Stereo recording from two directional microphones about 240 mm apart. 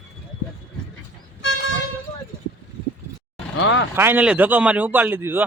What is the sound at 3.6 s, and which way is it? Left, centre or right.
Speech, left.